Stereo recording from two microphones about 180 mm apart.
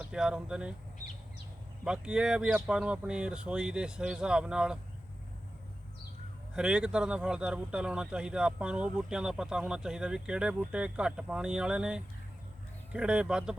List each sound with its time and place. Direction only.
0.0 s speech: 5° right (ahead or behind)
1.8 s speech: 5° right (ahead or behind)
6.5 s speech: 5° right (ahead or behind)